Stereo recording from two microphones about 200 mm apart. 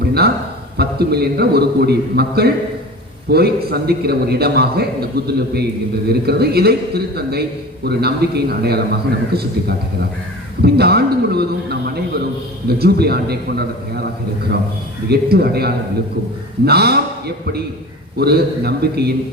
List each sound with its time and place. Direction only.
0.8 s a man's voice: 55° right (ahead or behind)
15.1 s a man's voice: 50° right (ahead or behind)